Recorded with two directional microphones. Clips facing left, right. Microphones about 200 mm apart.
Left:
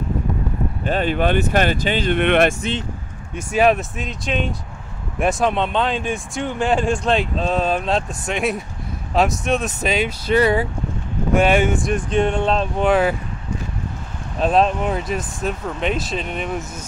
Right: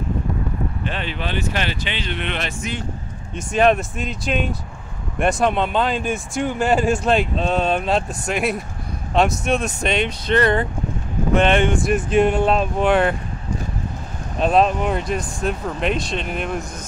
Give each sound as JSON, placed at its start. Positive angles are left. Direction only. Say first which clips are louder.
{"t": 0.8, "sound": "speech", "louder": "left 8 dB", "side_deg": 45}
{"t": 3.3, "sound": "speech", "louder": "even", "side_deg": 5}
{"t": 14.4, "sound": "speech", "louder": "even", "side_deg": 0}